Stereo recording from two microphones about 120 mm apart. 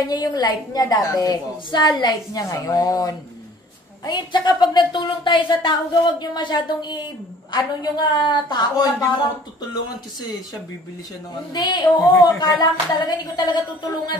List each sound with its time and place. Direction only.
0.0 s a woman's voice: 35° left (ahead or behind)
11.5 s a woman's voice: 40° left (ahead or behind)